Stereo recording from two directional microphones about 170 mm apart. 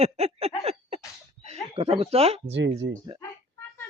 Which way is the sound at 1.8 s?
35° right (ahead or behind).